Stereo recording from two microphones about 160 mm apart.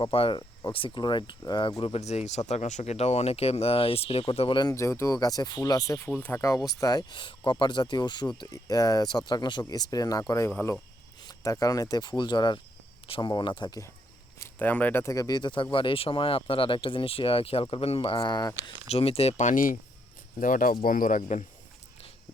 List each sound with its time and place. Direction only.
0.0 s speech: 35° left (ahead or behind)
4.7 s speech: 20° left (ahead or behind); by 21.4 s 45° left (ahead or behind)